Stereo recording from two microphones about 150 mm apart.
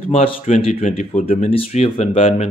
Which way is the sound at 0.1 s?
40° left (ahead or behind).